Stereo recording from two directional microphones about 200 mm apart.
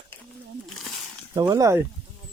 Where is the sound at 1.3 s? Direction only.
15° right (ahead or behind).